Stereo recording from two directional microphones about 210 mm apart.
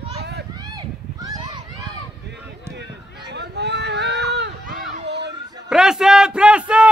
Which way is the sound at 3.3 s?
55° right (ahead or behind).